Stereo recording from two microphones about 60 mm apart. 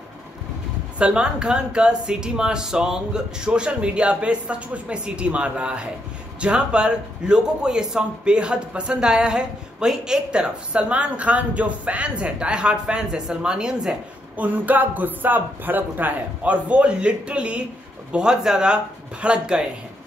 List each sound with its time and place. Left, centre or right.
0.9 s a man's voice: centre
14.3 s a man's voice: right